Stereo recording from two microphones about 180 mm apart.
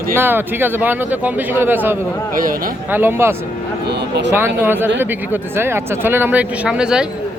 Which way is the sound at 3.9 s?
70° right (ahead or behind).